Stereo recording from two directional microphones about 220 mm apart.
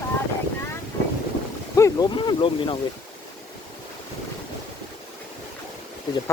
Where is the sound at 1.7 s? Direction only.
15° left (ahead or behind).